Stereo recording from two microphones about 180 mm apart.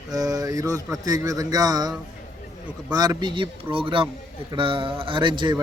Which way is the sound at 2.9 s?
25° right (ahead or behind).